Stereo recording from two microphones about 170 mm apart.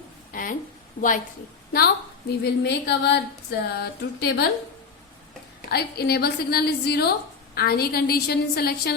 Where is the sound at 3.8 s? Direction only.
65° left (ahead or behind).